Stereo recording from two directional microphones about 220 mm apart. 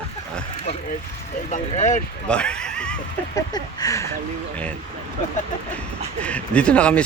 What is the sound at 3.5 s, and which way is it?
Speech, 15° left (ahead or behind).